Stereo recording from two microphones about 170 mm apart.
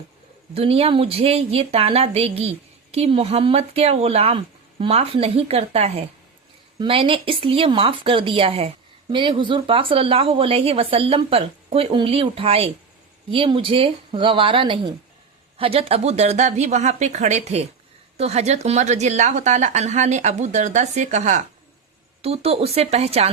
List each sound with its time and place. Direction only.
0.5 s speech: 35° right (ahead or behind)